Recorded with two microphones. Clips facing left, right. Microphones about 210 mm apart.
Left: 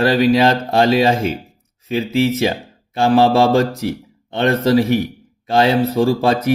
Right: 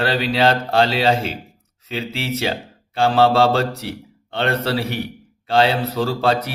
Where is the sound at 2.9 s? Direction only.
15° left (ahead or behind).